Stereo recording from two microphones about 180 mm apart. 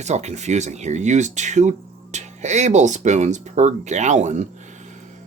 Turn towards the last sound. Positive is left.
turn(degrees=-40)  # may be behind; listen again after turning